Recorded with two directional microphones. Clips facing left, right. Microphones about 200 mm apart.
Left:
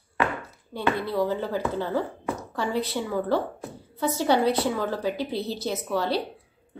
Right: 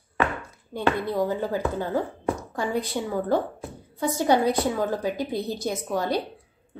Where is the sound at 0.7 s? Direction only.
15° right (ahead or behind).